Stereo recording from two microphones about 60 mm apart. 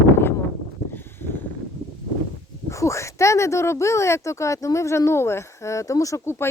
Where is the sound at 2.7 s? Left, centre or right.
Left.